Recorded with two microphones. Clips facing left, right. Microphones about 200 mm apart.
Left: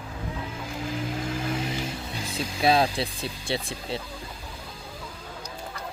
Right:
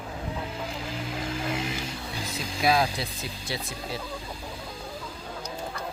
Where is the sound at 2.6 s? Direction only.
30° left (ahead or behind).